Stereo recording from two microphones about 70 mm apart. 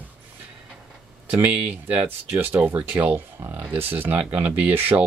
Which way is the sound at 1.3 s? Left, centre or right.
Right.